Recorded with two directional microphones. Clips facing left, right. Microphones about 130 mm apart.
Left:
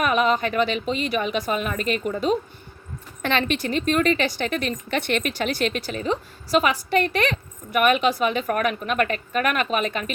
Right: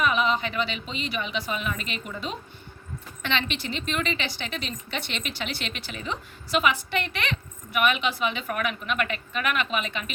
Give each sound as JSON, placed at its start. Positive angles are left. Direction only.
{"t": 0.0, "sound": "a woman's voice", "side_deg": 50}